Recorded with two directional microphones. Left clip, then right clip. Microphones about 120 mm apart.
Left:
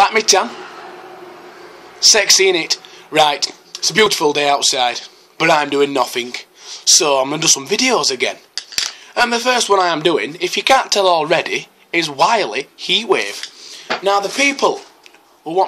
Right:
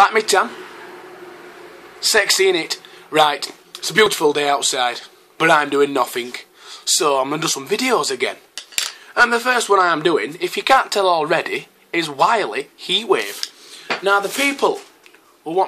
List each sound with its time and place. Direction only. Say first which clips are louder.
0.0 s speech: left 1 dB; 15° left (ahead or behind)
2.0 s a man's voice: left 4 dB; 15° left (ahead or behind)